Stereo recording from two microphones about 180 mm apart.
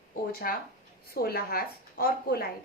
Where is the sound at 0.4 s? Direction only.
55° left (ahead or behind).